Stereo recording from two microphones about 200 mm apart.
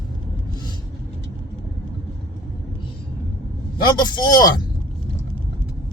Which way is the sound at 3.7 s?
20° left (ahead or behind).